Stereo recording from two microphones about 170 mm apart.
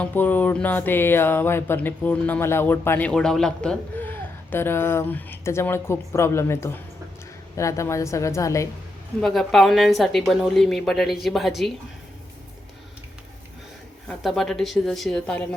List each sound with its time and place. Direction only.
0.0 s a sound: 10° left (ahead or behind)
9.2 s a woman's voice: centre (ahead or behind)
14.1 s a woman's voice: centre (ahead or behind)